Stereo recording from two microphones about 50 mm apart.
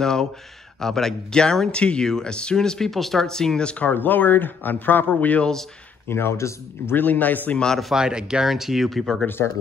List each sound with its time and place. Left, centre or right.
0.0 s speech: centre
1.8 s speech: left
3.8 s speech: left
6.0 s speech: left
6.9 s speech: left
7.5 s speech: centre
7.9 s speech: centre
8.5 s speech: centre